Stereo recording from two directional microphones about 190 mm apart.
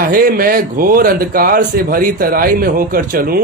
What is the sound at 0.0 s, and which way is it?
A man's voice, 50° right (ahead or behind).